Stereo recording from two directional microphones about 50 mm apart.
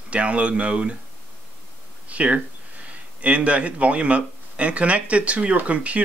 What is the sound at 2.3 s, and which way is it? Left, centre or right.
Speech, right.